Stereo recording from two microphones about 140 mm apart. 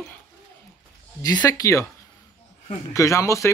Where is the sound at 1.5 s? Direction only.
20° left (ahead or behind).